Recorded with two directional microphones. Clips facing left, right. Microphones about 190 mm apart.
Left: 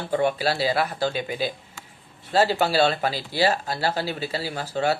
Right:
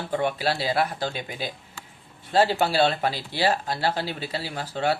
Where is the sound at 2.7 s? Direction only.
40° left (ahead or behind).